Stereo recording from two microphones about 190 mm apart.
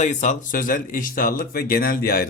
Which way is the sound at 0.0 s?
40° left (ahead or behind).